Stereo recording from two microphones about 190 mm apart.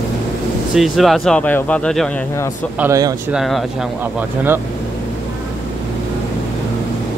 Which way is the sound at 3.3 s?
Centre (ahead or behind).